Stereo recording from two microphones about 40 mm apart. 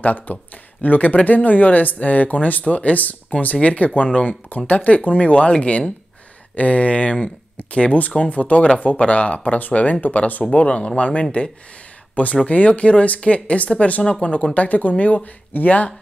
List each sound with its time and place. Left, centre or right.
0.0 s speech: left
12.4 s speech: left